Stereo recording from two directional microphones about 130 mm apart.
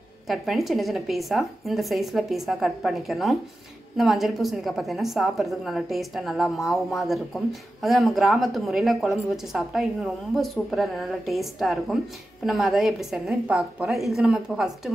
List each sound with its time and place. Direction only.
0.3 s a woman's voice: centre (ahead or behind)